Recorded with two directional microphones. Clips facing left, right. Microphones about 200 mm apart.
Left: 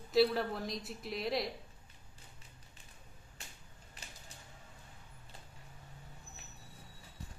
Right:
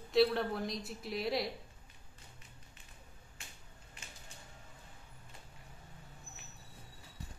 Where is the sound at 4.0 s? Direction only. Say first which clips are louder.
Left 1 dB; 35° left (ahead or behind).